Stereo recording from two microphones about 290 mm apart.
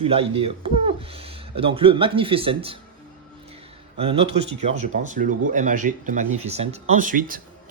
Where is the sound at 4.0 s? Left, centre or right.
Centre.